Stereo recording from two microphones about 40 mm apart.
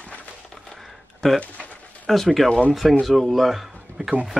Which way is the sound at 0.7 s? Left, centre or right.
Centre.